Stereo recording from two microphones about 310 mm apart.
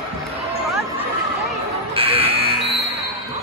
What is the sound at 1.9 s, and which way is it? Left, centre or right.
Fire alarm, centre.